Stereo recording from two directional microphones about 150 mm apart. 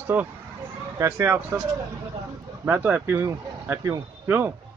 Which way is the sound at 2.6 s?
15° right (ahead or behind).